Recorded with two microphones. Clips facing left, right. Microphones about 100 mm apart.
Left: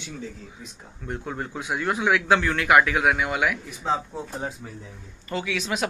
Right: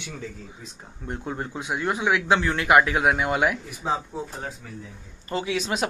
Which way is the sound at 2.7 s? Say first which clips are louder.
Even; 30° right (ahead or behind).